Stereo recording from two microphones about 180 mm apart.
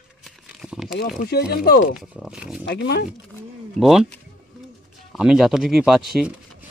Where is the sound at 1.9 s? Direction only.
Centre (ahead or behind).